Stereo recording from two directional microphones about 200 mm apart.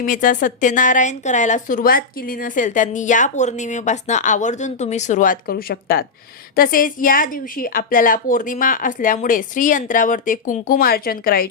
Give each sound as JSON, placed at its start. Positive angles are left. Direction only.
{"t": 0.0, "sound": "a woman's voice", "side_deg": 40}